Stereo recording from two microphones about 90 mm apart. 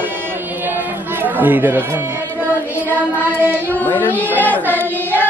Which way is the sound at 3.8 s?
20° left (ahead or behind).